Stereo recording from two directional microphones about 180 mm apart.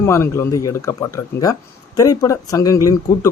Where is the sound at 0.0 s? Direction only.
15° left (ahead or behind).